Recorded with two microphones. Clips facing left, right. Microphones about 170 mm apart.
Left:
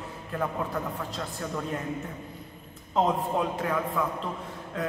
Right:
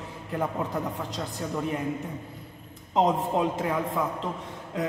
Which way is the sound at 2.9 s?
20° right (ahead or behind).